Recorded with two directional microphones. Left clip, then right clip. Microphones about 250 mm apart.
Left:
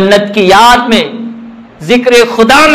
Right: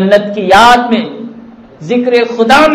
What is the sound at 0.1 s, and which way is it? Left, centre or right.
A man's voice, left.